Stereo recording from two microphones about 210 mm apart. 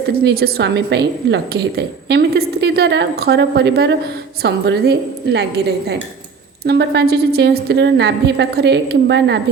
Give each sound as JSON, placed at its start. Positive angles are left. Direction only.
{"t": 0.3, "sound": "a woman's voice", "side_deg": -45}